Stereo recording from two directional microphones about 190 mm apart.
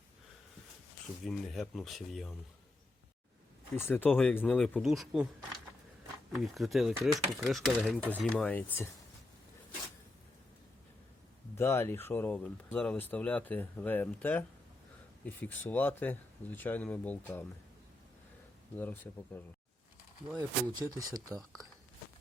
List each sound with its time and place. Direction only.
1.2 s speech: centre (ahead or behind)
3.8 s speech: 10° left (ahead or behind)
6.3 s speech: centre (ahead or behind)
8.4 s speech: 10° left (ahead or behind)
11.5 s speech: 15° left (ahead or behind)
18.8 s speech: 10° left (ahead or behind)
20.3 s speech: 20° right (ahead or behind)